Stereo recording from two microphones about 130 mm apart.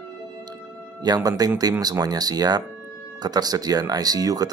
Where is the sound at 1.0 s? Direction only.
30° right (ahead or behind).